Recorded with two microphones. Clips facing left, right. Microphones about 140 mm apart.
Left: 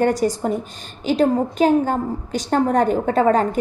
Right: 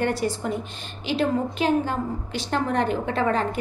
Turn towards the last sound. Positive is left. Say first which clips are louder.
# left 7 dB
turn(degrees=45)  # may be behind; listen again after turning